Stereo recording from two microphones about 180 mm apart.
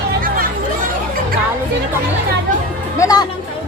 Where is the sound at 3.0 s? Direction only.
20° left (ahead or behind).